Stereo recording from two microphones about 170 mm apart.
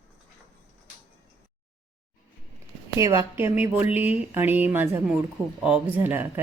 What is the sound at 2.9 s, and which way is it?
Speech, 15° right (ahead or behind).